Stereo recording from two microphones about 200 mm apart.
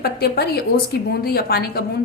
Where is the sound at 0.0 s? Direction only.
50° left (ahead or behind).